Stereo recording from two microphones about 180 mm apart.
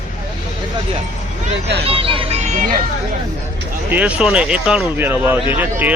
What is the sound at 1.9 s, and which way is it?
Speech, 30° right (ahead or behind).